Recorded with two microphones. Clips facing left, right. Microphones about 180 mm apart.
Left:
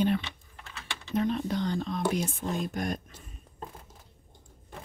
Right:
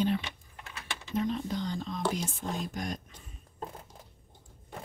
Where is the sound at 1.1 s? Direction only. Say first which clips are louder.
Left 3 dB; 65° left (ahead or behind).